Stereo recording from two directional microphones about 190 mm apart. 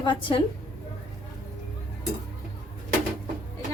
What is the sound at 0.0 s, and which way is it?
Speech, 25° left (ahead or behind).